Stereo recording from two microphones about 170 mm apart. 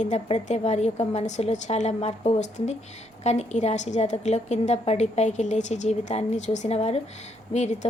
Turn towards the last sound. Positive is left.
turn(degrees=40)  # may be behind; listen again after turning